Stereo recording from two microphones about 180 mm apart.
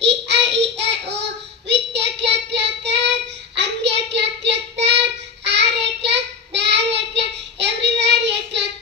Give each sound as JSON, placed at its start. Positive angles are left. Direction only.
{"t": 0.0, "sound": "child singing", "side_deg": -75}